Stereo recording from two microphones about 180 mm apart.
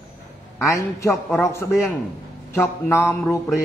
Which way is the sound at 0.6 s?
15° left (ahead or behind).